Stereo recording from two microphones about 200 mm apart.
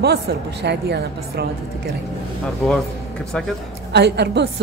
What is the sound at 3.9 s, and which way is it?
Speech, 55° right (ahead or behind).